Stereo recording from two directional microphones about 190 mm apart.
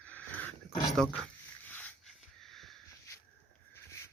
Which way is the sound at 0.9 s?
5° left (ahead or behind).